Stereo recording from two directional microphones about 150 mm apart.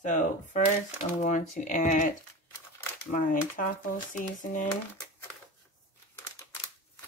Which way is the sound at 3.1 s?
65° left (ahead or behind).